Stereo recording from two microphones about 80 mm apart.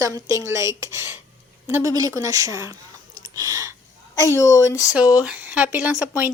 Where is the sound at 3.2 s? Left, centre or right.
Right.